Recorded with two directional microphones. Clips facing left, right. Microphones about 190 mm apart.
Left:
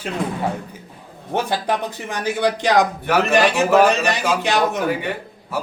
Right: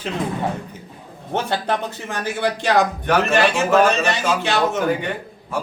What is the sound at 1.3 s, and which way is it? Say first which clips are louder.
Speech: left 1 dB; 10° left (ahead or behind).